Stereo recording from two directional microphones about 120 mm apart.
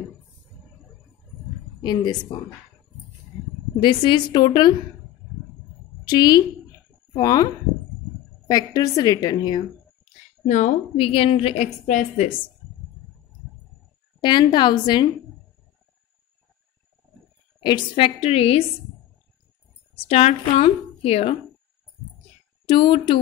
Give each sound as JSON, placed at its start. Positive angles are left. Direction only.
{"t": 1.8, "sound": "a woman's voice", "side_deg": 35}
{"t": 3.8, "sound": "a woman's voice", "side_deg": 40}
{"t": 6.0, "sound": "a woman's voice", "side_deg": 35}
{"t": 8.5, "sound": "a woman's voice", "side_deg": 35}
{"t": 10.4, "sound": "a woman's voice", "side_deg": 75}
{"t": 11.0, "sound": "a woman's voice", "side_deg": 50}
{"t": 14.2, "sound": "a woman's voice", "side_deg": 40}
{"t": 17.6, "sound": "a woman's voice", "side_deg": 40}
{"t": 20.0, "sound": "a woman's voice", "side_deg": 60}
{"t": 22.7, "sound": "a woman's voice", "side_deg": 45}